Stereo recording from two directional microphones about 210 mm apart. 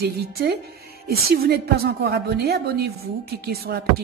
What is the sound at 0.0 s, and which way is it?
Speech, 50° right (ahead or behind).